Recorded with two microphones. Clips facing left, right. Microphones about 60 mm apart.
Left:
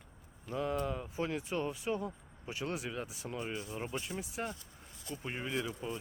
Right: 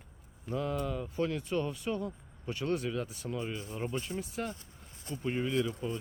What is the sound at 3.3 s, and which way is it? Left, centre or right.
Speech, left.